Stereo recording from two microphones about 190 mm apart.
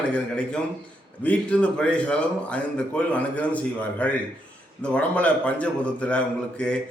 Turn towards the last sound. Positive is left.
turn(degrees=5)  # may be behind; listen again after turning